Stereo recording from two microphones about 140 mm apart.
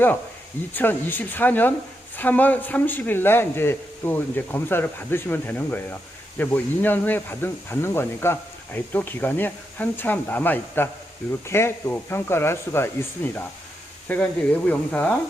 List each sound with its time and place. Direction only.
0.7 s speech: 15° left (ahead or behind)